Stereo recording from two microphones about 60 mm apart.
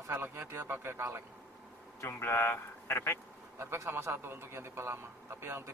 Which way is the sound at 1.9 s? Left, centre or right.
Left.